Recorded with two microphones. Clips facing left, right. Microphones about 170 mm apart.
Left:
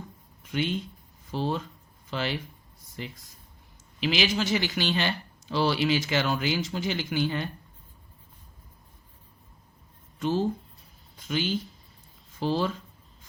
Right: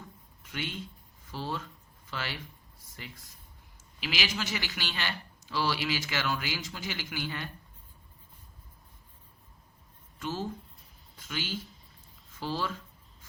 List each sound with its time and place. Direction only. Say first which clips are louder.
0.5 s speech: left 9 dB; 20° left (ahead or behind)
4.0 s speech: left 8 dB; 25° left (ahead or behind)
10.2 s speech: left 9 dB; 20° left (ahead or behind)